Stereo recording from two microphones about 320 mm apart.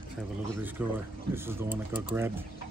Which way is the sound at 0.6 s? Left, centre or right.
Centre.